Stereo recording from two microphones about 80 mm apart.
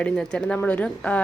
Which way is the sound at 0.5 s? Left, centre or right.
Left.